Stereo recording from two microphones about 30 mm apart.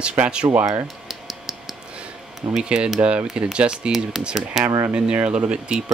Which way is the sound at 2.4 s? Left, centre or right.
Right.